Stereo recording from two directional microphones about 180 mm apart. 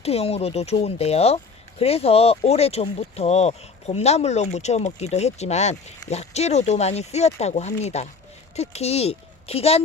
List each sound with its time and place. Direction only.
0.0 s speech: 35° left (ahead or behind)